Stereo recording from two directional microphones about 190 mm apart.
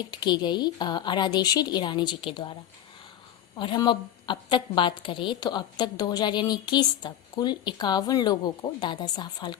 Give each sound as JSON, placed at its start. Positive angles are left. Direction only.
{"t": 0.1, "sound": "a woman's voice", "side_deg": 25}
{"t": 3.6, "sound": "a woman's voice", "side_deg": 25}